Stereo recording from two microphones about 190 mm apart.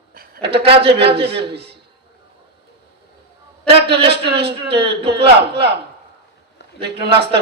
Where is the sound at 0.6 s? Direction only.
30° right (ahead or behind).